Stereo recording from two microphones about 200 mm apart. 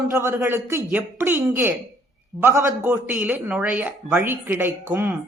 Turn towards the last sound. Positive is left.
turn(degrees=-10)  # may be behind; listen again after turning